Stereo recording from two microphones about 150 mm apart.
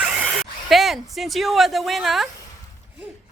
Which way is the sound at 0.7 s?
Centre (ahead or behind).